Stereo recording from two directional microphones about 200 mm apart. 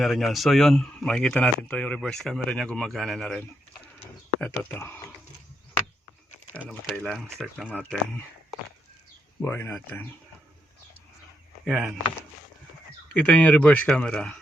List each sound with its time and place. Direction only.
0.0 s speech: centre (ahead or behind)
6.7 s speech: 5° left (ahead or behind)
9.4 s speech: 10° left (ahead or behind)
11.6 s speech: 5° right (ahead or behind)
13.1 s speech: 5° left (ahead or behind)